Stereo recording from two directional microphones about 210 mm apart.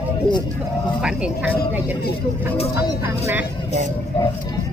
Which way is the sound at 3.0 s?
10° right (ahead or behind).